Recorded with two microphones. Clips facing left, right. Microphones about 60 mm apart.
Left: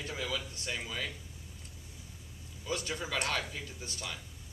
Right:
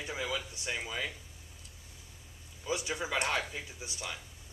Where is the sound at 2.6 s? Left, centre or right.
Centre.